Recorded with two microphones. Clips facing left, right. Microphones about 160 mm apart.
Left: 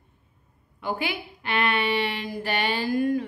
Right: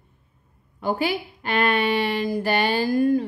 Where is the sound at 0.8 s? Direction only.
40° right (ahead or behind).